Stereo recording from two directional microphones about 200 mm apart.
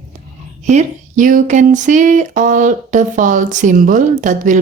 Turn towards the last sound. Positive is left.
turn(degrees=-40)  # may be behind; listen again after turning